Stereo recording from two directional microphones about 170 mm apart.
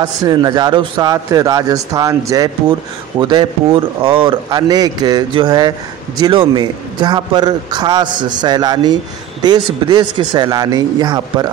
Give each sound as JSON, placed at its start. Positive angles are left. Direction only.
{"t": 0.0, "sound": "a man's voice", "side_deg": -25}